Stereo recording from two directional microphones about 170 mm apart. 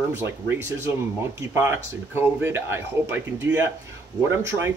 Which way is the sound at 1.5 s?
15° right (ahead or behind).